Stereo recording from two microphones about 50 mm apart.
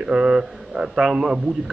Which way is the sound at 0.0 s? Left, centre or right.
Centre.